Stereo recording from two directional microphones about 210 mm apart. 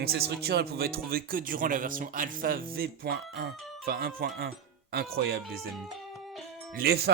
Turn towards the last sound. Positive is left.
turn(degrees=-50)  # may be behind; listen again after turning